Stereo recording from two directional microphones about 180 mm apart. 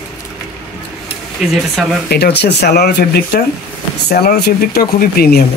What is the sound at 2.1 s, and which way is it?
Speech, 65° left (ahead or behind).